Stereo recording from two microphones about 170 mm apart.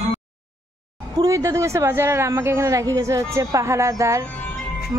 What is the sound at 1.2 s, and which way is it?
Speech, 20° right (ahead or behind).